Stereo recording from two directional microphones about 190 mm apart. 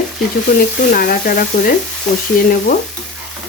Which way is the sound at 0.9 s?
50° left (ahead or behind).